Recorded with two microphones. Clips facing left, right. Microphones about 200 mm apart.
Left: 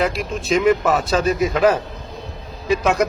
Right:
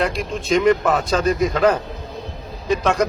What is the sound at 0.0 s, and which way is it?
Speech, 5° left (ahead or behind).